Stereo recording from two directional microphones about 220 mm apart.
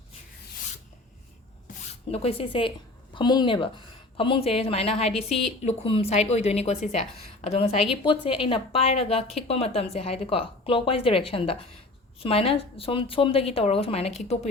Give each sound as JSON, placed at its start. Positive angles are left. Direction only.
{"t": 2.0, "sound": "speech", "side_deg": 25}